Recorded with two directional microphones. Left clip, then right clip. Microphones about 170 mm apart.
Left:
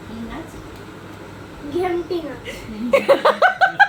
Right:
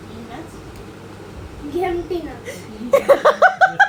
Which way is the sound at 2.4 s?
Centre (ahead or behind).